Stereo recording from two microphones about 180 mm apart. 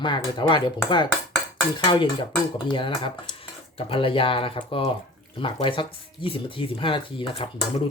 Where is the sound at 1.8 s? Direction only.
25° left (ahead or behind).